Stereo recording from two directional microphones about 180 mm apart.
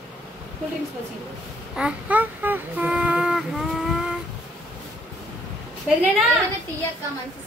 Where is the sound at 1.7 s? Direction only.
5° right (ahead or behind).